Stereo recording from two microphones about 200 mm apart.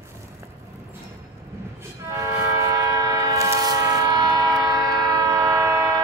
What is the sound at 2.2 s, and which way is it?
Train, 15° right (ahead or behind).